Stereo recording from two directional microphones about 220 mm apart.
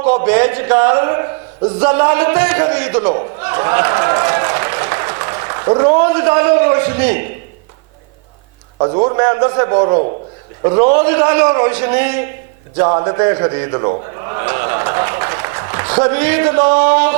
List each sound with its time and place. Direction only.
0.3 s a man's voice: 15° right (ahead or behind)
8.8 s a man's voice: 30° right (ahead or behind)
10.9 s speech: 15° right (ahead or behind)
12.7 s a sound: 25° right (ahead or behind)
16.7 s speech: 15° right (ahead or behind)